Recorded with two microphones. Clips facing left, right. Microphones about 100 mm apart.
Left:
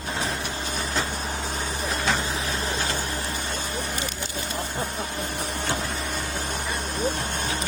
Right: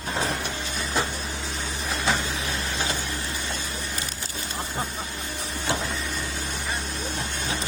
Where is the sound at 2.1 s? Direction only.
35° left (ahead or behind).